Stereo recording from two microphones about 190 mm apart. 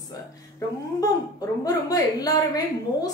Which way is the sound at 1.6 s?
20° left (ahead or behind).